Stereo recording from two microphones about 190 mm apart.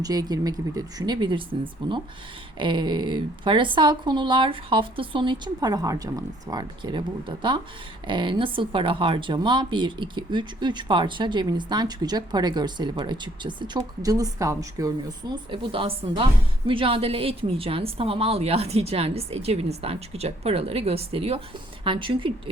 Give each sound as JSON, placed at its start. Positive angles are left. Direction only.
{"t": 0.0, "sound": "speech", "side_deg": -20}
{"t": 15.4, "sound": "a woman's voice", "side_deg": -30}